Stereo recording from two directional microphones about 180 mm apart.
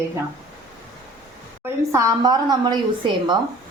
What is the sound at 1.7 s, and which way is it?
A woman's voice, 15° right (ahead or behind).